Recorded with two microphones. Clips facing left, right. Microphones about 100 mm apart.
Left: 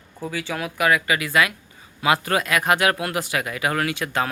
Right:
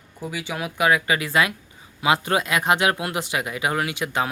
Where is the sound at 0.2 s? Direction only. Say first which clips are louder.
Left 1 dB; 15° right (ahead or behind).